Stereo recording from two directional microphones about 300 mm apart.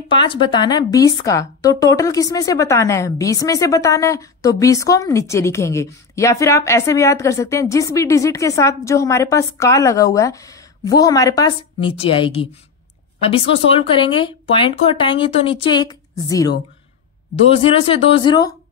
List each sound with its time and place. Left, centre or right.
0.1 s speech: centre